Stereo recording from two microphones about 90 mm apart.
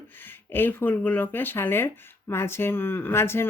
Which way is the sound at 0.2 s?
25° left (ahead or behind).